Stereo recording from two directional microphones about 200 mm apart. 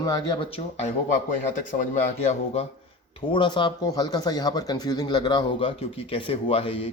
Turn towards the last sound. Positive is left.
turn(degrees=25)  # may be behind; listen again after turning